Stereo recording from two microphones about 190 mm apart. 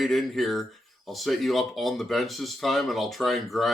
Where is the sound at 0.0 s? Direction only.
Centre (ahead or behind).